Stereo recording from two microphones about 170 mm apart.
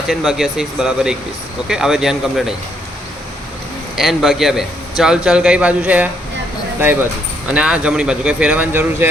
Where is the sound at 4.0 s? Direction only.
Centre (ahead or behind).